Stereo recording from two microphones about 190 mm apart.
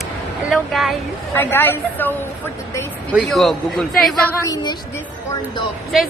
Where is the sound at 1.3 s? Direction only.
10° left (ahead or behind).